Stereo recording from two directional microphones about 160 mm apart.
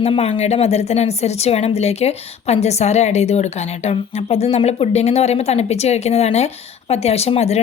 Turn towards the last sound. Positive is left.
turn(degrees=40)  # may be behind; listen again after turning